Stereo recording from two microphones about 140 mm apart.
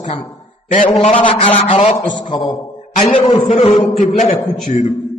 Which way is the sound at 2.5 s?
60° left (ahead or behind).